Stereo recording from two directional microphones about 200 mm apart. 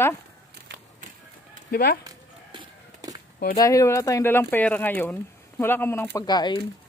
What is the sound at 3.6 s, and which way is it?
Speech, 15° left (ahead or behind).